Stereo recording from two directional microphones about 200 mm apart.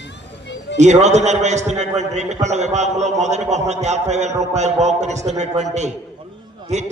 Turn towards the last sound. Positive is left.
turn(degrees=-35)  # may be behind; listen again after turning